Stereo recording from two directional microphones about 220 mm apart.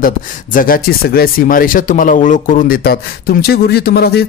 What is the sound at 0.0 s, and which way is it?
Speech, 40° left (ahead or behind).